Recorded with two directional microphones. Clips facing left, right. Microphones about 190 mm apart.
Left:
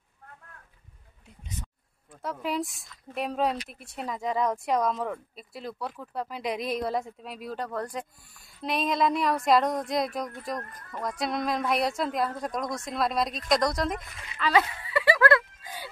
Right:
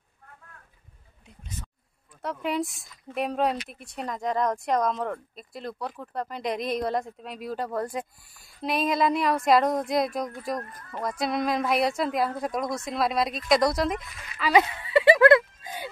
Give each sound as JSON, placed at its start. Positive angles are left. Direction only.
{"t": 2.2, "sound": "speech", "side_deg": 0}
{"t": 14.4, "sound": "music", "side_deg": -20}